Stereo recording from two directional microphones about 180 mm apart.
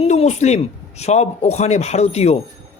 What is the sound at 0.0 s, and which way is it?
A man's voice, 35° left (ahead or behind).